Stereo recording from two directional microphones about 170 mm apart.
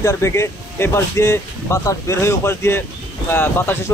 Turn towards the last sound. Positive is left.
turn(degrees=10)  # may be behind; listen again after turning